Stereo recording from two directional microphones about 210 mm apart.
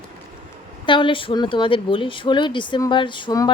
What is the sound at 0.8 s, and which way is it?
Speech, 25° left (ahead or behind).